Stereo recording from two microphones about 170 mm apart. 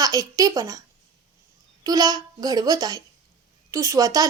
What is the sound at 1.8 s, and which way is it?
A child's voice, 20° right (ahead or behind).